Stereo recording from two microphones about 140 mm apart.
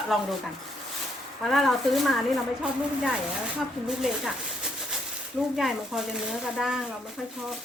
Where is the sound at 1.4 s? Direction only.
Centre (ahead or behind).